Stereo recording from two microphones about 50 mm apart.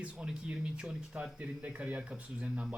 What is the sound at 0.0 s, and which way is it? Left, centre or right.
Speech, right.